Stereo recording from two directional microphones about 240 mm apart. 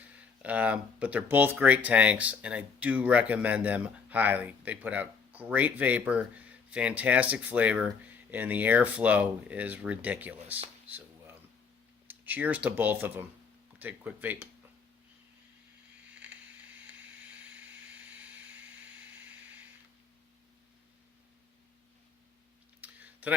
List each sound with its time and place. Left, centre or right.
0.4 s speech: centre
12.0 s speech: centre
22.8 s clicking: centre